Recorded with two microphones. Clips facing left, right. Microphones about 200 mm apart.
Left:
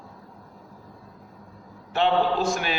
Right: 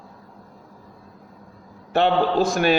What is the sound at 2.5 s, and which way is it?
Speech, 55° right (ahead or behind).